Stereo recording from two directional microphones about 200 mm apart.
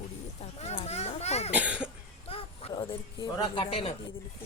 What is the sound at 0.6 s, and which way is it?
Speech, 30° left (ahead or behind).